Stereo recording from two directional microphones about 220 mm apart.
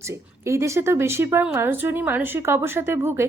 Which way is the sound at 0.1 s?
15° right (ahead or behind).